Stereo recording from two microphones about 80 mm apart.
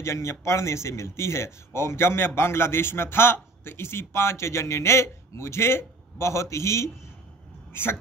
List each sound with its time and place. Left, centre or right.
0.0 s a man's voice: left